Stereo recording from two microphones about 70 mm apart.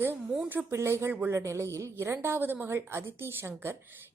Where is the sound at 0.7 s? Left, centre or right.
Right.